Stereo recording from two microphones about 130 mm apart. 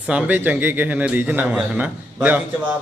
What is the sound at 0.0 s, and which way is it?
A man's voice, 10° right (ahead or behind).